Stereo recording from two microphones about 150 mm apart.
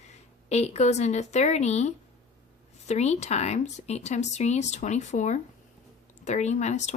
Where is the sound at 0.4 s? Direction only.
45° left (ahead or behind).